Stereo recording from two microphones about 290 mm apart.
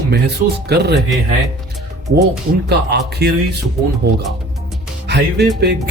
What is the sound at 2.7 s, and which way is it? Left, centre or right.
Speech, right.